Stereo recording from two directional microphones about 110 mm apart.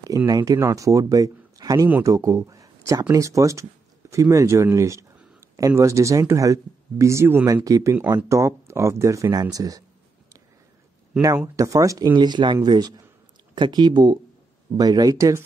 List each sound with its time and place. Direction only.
0.3 s speech: 35° right (ahead or behind)
11.3 s speech: 25° right (ahead or behind)
12.2 s speech: 45° right (ahead or behind)